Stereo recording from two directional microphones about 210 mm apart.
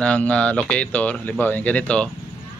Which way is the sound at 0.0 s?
5° left (ahead or behind).